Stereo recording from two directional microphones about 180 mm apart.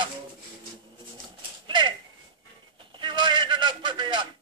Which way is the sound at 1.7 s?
25° right (ahead or behind).